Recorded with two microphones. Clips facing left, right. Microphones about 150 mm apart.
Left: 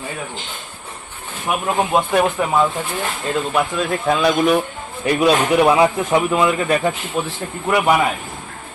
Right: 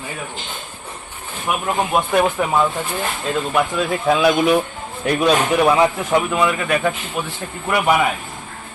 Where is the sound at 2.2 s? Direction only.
5° right (ahead or behind).